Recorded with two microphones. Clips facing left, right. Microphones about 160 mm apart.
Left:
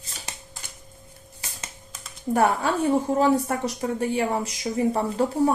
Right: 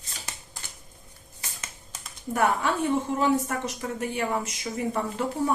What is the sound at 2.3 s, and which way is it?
Speech, 35° left (ahead or behind).